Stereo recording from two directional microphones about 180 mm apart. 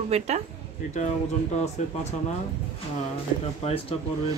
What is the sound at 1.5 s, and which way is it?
Speech, 40° left (ahead or behind).